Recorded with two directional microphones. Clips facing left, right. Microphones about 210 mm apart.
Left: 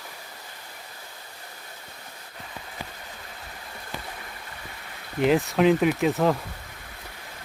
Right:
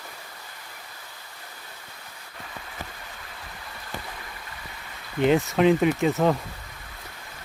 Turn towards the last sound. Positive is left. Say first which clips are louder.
# even
turn(degrees=0)  # may be behind; listen again after turning